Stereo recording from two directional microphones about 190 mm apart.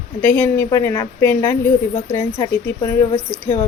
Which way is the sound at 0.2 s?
10° left (ahead or behind).